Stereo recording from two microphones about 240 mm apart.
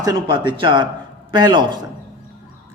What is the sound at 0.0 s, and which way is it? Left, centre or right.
A man's voice, centre.